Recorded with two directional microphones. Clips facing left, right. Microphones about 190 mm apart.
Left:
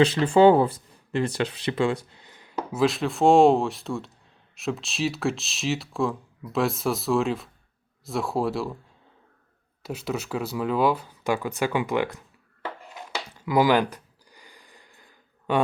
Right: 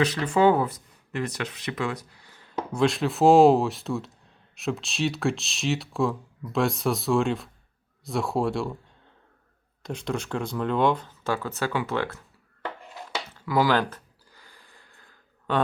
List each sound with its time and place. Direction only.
0.0 s speech: 30° left (ahead or behind)
2.6 s speech: centre (ahead or behind)
9.8 s speech: 5° left (ahead or behind)
12.9 s a sound: 20° left (ahead or behind)